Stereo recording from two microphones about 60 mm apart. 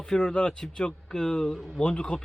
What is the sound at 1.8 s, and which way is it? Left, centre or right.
Speech, centre.